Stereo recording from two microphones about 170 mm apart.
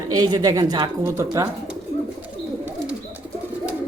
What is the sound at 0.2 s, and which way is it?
A woman's voice, 20° right (ahead or behind).